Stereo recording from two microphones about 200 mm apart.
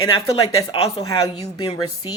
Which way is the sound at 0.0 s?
20° left (ahead or behind).